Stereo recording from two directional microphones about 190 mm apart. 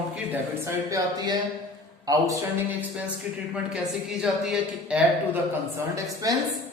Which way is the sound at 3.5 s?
5° right (ahead or behind).